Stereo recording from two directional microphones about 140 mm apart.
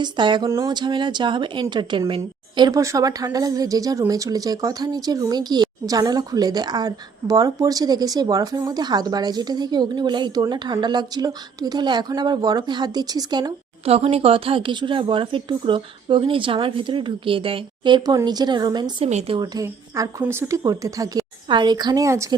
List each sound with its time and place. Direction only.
0.0 s a woman's voice: 35° right (ahead or behind)
13.8 s a woman's voice: 45° right (ahead or behind)
19.0 s speech: 50° right (ahead or behind)
19.4 s a woman's voice: 25° right (ahead or behind)